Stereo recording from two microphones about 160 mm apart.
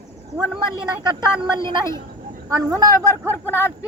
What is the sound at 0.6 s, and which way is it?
A woman's voice, 30° right (ahead or behind).